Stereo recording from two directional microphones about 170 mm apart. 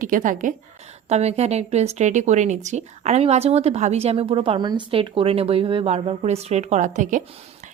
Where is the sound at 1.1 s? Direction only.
40° right (ahead or behind).